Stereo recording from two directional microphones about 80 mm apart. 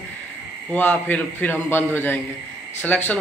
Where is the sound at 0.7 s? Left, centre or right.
Left.